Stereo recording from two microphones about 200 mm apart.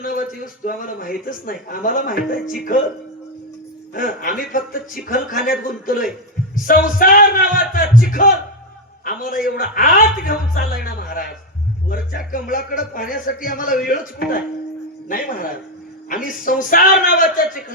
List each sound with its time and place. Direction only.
0.0 s speech: 45° left (ahead or behind)
3.9 s speech: 45° left (ahead or behind)